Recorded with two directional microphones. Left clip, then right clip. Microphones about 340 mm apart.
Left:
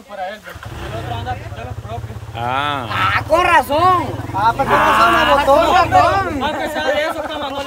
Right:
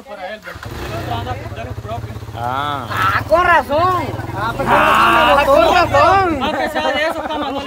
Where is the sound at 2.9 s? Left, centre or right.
Left.